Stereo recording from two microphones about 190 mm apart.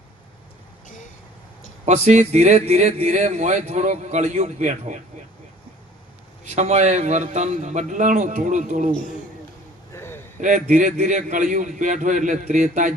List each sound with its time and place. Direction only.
1.8 s a man's voice: 35° right (ahead or behind)
6.6 s a man's voice: 35° right (ahead or behind)
9.9 s a sound: 10° left (ahead or behind)
10.4 s a man's voice: 40° right (ahead or behind)